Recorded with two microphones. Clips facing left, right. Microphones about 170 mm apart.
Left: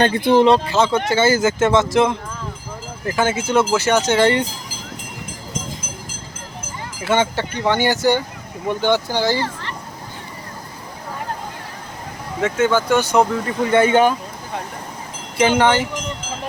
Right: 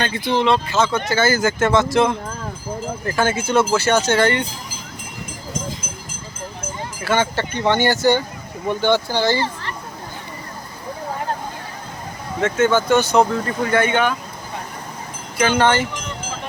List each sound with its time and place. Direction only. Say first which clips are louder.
0.0 s speech: left 6 dB; 50° left (ahead or behind); by 4.3 s 15° left (ahead or behind)
7.0 s speech: left 1 dB; 20° left (ahead or behind)
12.4 s speech: even; 10° left (ahead or behind)
13.7 s speech: left 4 dB; 25° left (ahead or behind)
13.9 s speech: left 5 dB; 40° left (ahead or behind)
15.4 s speech: left 1 dB; 20° left (ahead or behind)